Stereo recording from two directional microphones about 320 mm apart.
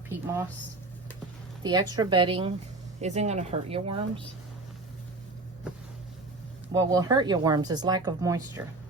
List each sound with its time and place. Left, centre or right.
1.6 s speech: centre
6.7 s speech: centre